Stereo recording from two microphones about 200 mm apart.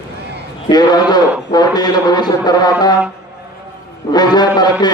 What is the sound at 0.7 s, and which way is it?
A man's voice, 20° left (ahead or behind).